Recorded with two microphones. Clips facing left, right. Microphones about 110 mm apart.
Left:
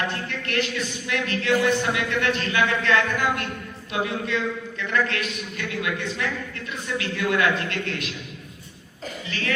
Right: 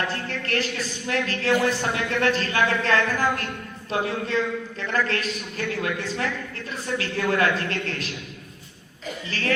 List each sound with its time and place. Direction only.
0.3 s a man's voice: 35° right (ahead or behind)
9.2 s a man's voice: 35° right (ahead or behind)